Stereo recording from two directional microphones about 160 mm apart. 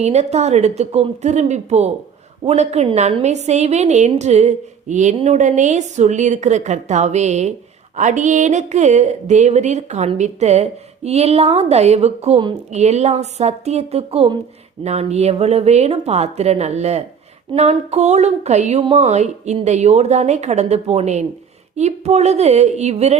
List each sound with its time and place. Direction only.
0.0 s speech: 45° right (ahead or behind)